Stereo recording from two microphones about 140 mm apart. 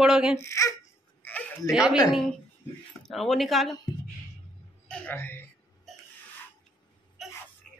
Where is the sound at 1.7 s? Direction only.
Centre (ahead or behind).